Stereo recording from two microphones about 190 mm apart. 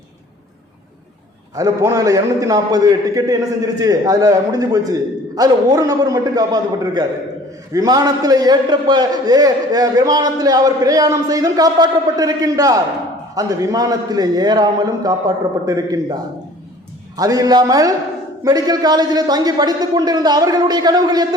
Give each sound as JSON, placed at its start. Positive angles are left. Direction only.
{"t": 1.5, "sound": "a man's voice", "side_deg": -15}
{"t": 17.2, "sound": "a man's voice", "side_deg": -20}